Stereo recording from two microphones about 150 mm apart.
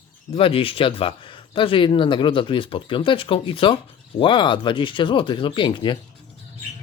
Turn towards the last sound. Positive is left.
turn(degrees=30)  # may be behind; listen again after turning